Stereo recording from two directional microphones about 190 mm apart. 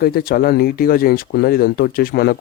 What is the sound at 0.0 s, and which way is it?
Speech, 50° left (ahead or behind).